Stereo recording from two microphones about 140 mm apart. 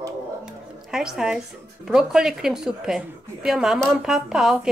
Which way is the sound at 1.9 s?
5° right (ahead or behind).